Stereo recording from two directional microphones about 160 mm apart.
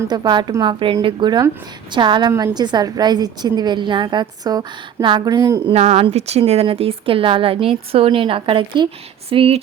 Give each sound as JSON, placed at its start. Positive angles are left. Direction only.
{"t": 0.1, "sound": "a woman's voice", "side_deg": -25}
{"t": 5.7, "sound": "speech", "side_deg": -40}